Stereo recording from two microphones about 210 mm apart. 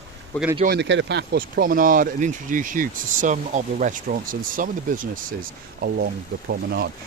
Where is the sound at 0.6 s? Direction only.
50° right (ahead or behind).